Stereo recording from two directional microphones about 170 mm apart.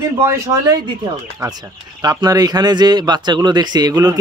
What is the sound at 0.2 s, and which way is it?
A man's voice, 20° right (ahead or behind).